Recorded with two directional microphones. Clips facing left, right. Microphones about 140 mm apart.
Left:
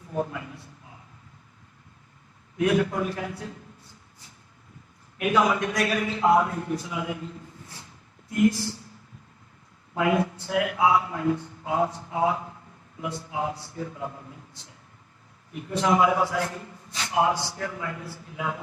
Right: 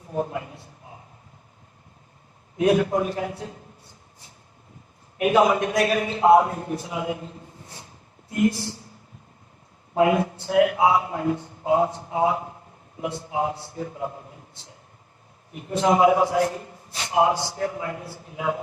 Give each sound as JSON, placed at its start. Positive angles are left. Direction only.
{"t": 0.3, "sound": "a man's voice", "side_deg": -30}
{"t": 2.6, "sound": "a man's voice", "side_deg": -25}
{"t": 5.1, "sound": "a man's voice", "side_deg": -25}
{"t": 9.9, "sound": "a man's voice", "side_deg": -30}
{"t": 15.8, "sound": "a man's voice", "side_deg": -30}